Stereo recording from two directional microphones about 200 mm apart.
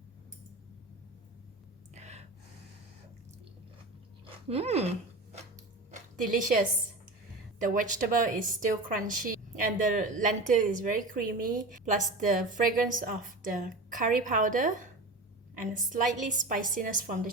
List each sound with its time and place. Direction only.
2.0 s gasp: 35° right (ahead or behind)
4.4 s a woman's voice: 30° right (ahead or behind)
7.6 s a woman's voice: 40° right (ahead or behind)